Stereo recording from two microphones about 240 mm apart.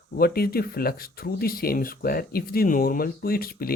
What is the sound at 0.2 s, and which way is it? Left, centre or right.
Speech, left.